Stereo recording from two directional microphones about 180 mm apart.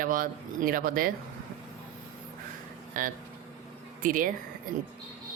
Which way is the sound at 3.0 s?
50° right (ahead or behind).